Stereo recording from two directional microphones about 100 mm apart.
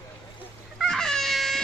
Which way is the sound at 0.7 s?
5° left (ahead or behind).